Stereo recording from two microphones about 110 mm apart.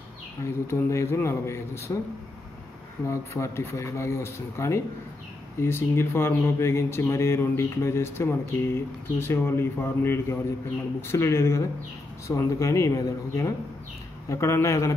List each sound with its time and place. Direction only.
0.4 s speech: 25° left (ahead or behind)
3.1 s speech: 25° left (ahead or behind)